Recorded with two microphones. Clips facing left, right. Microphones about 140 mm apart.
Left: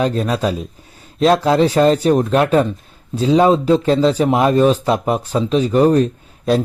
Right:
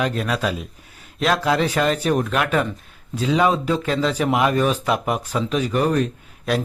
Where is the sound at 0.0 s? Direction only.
30° left (ahead or behind).